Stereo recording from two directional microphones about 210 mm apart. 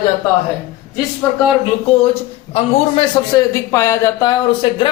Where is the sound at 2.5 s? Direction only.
25° left (ahead or behind).